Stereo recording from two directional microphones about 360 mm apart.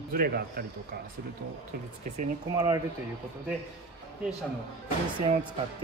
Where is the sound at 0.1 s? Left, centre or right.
Right.